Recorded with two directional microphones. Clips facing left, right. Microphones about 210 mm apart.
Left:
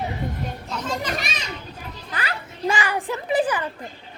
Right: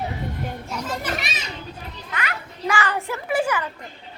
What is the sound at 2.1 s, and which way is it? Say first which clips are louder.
Children playing: even; 30° left (ahead or behind).